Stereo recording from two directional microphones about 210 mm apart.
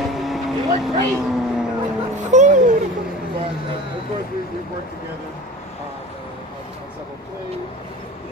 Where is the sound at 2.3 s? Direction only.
35° right (ahead or behind).